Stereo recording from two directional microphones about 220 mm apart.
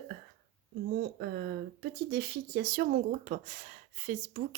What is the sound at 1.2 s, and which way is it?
Speech, 45° right (ahead or behind).